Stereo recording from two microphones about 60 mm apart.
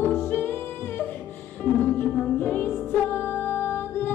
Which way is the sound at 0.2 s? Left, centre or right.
Left.